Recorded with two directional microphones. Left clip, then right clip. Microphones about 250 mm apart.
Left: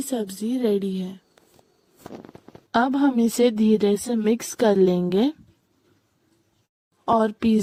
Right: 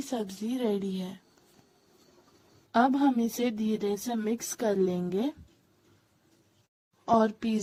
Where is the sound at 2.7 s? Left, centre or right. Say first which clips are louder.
Left 4 dB; left.